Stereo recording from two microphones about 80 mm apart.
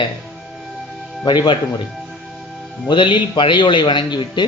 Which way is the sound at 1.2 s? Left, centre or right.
Left.